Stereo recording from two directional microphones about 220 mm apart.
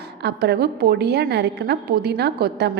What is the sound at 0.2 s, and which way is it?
A woman's voice, 50° right (ahead or behind).